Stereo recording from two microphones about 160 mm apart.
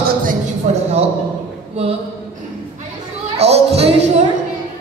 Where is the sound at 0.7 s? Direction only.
45° right (ahead or behind).